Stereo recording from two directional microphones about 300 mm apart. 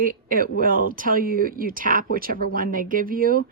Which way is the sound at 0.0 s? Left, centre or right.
Right.